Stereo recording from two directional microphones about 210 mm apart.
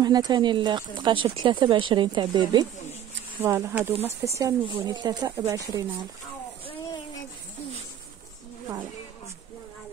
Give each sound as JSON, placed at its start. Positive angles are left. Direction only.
{"t": 0.0, "sound": "speech", "side_deg": -20}